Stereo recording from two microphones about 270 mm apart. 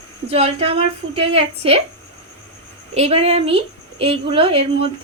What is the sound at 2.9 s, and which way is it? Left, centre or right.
A woman's voice, right.